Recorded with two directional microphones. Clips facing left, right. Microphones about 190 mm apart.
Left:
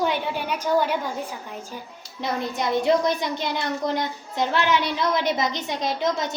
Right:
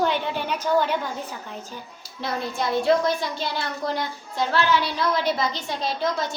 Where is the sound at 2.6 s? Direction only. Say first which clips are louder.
Even; 20° left (ahead or behind).